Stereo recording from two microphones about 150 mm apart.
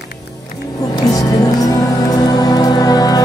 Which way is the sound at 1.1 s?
25° left (ahead or behind).